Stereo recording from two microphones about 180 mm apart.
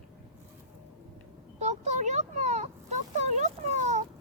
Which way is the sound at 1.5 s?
40° right (ahead or behind).